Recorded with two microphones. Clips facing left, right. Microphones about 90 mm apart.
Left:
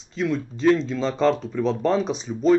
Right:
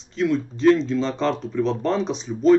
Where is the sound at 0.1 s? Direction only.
Centre (ahead or behind).